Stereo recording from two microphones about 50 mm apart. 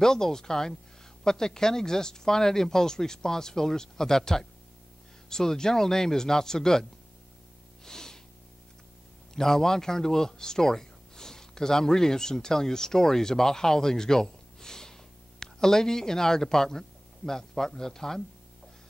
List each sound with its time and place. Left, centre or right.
0.0 s speech: centre
7.8 s snort: centre
9.3 s a man's voice: centre